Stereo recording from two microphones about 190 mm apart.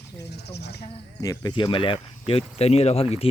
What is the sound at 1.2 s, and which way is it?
Speech, 20° left (ahead or behind).